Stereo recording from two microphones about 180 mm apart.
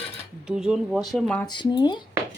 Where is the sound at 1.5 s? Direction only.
25° left (ahead or behind).